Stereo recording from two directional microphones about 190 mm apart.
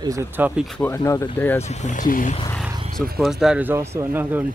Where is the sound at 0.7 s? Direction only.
10° left (ahead or behind).